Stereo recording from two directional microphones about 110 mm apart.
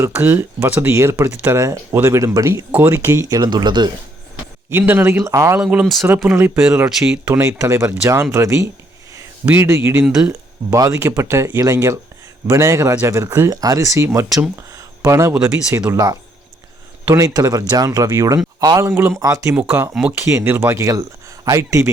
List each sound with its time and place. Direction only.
0.0 s speech: 20° right (ahead or behind)
2.7 s speech: 20° right (ahead or behind)
3.2 s speech: 35° right (ahead or behind)
4.7 s speech: 20° right (ahead or behind)
5.5 s speech: 5° right (ahead or behind)
6.2 s speech: 15° right (ahead or behind)
7.3 s speech: 25° right (ahead or behind)
17.2 s speech: 30° right (ahead or behind)
19.9 s speech: 10° right (ahead or behind)
20.2 s speech: 20° right (ahead or behind)